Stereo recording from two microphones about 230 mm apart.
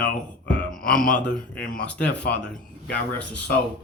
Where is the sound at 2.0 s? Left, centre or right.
Left.